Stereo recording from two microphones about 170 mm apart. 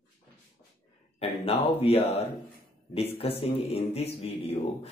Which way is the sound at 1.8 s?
35° left (ahead or behind).